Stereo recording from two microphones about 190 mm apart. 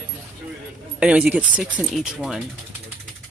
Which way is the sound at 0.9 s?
5° right (ahead or behind).